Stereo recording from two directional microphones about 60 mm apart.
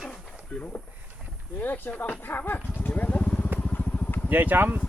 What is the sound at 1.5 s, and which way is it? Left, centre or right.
Speech, left.